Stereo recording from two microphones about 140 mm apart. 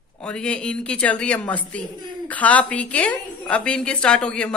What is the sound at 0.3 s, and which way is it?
A woman's voice, 5° left (ahead or behind).